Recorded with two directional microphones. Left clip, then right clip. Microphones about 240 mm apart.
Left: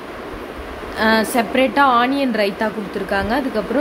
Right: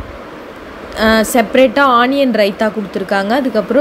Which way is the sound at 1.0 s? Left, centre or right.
Centre.